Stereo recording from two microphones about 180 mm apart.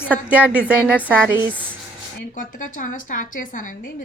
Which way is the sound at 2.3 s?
45° left (ahead or behind).